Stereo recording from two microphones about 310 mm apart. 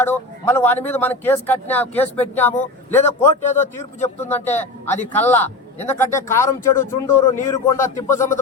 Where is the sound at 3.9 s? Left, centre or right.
Left.